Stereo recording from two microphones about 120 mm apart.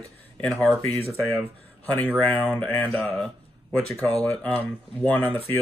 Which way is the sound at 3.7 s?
10° left (ahead or behind).